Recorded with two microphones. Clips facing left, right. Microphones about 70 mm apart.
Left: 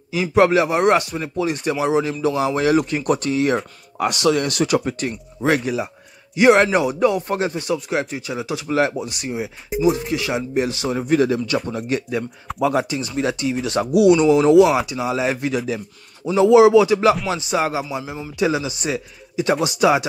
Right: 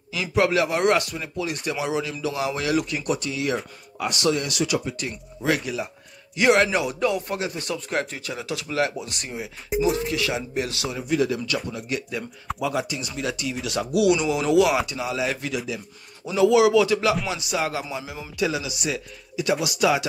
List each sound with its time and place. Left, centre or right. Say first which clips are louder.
0.1 s a man's voice: left 6 dB; left
3.1 s speech: left 9 dB; left
4.0 s speech: left 5 dB; left
4.5 s a man's voice: left 6 dB; left
7.5 s a man's voice: left 5 dB; centre
9.1 s speech: left 7 dB; centre
9.7 s speech: left 4 dB; centre
10.0 s a man's voice: left 3 dB; left
10.9 s a man's voice: left 5 dB; left
14.8 s speech: left 4 dB; centre
15.0 s a man's voice: left 5 dB; left